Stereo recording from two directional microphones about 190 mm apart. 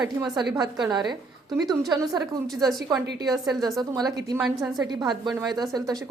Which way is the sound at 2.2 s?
Centre (ahead or behind).